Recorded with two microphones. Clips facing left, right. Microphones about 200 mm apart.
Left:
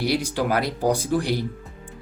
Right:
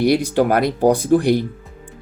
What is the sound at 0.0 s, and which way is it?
Speech, 55° right (ahead or behind).